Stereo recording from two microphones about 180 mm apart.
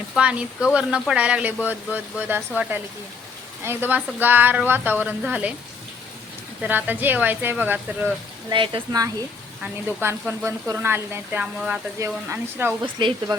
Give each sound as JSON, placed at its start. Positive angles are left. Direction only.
{"t": 0.2, "sound": "speech", "side_deg": -5}
{"t": 6.6, "sound": "speech", "side_deg": -10}
{"t": 8.4, "sound": "speech", "side_deg": -30}
{"t": 9.6, "sound": "speech", "side_deg": -10}
{"t": 12.8, "sound": "speech", "side_deg": -25}